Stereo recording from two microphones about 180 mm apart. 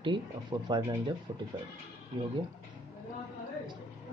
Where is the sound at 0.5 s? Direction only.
25° right (ahead or behind).